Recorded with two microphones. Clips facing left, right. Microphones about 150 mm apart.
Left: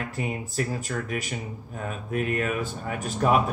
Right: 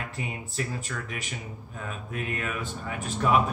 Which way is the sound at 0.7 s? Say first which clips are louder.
Left 5 dB; 40° left (ahead or behind).